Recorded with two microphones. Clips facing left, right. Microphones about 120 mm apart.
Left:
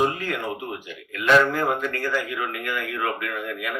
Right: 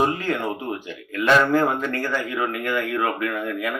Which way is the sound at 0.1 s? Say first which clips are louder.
Right 4 dB; 30° right (ahead or behind).